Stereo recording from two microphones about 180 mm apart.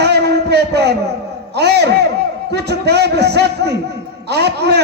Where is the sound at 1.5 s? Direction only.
65° right (ahead or behind).